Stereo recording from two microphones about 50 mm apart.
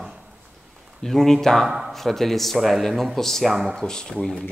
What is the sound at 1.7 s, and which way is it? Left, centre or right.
Speech, centre.